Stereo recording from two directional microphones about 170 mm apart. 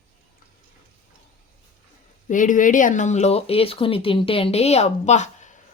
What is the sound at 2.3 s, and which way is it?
Speech, 50° left (ahead or behind).